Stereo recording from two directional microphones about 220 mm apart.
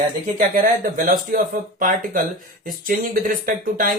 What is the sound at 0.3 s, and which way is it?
Speech, 35° right (ahead or behind).